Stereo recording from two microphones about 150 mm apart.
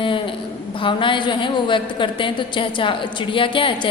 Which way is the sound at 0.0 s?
35° left (ahead or behind).